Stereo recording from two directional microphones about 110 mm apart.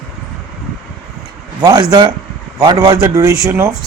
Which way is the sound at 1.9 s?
40° right (ahead or behind).